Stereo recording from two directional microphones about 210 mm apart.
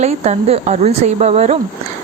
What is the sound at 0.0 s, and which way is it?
Speech, 30° right (ahead or behind).